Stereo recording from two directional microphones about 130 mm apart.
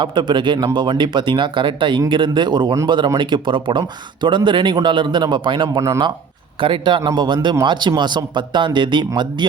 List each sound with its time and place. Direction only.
0.0 s speech: 35° right (ahead or behind)